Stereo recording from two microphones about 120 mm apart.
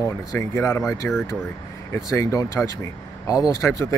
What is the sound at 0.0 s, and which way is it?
Speech, 25° left (ahead or behind).